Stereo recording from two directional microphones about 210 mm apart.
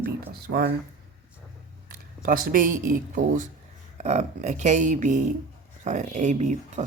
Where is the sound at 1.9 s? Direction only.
40° right (ahead or behind).